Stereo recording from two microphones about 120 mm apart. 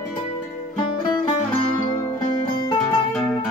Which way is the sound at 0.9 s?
40° left (ahead or behind).